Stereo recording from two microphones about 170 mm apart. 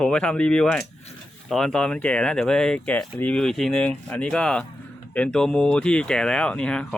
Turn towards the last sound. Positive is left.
turn(degrees=5)  # may be behind; listen again after turning